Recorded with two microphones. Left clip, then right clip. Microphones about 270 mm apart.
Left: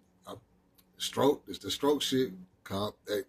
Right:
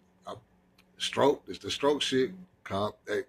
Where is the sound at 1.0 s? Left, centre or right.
Centre.